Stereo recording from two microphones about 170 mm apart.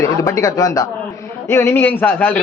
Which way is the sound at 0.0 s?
20° left (ahead or behind).